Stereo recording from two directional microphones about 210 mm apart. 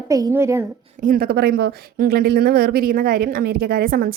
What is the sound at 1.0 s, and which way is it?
A woman's voice, 45° right (ahead or behind).